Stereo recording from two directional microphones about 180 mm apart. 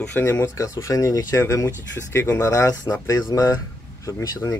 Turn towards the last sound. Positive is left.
turn(degrees=20)  # may be behind; listen again after turning